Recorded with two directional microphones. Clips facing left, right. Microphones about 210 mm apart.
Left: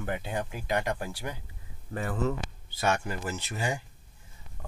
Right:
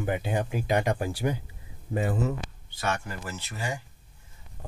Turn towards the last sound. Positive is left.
turn(degrees=20)  # may be behind; listen again after turning